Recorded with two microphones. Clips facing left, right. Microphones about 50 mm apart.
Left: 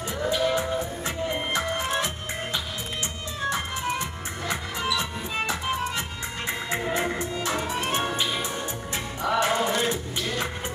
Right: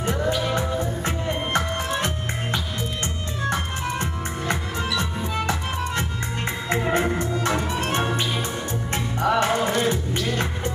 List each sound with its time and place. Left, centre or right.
0.0 s music: right